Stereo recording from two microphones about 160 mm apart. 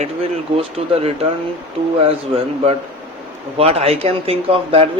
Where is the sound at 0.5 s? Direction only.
35° right (ahead or behind).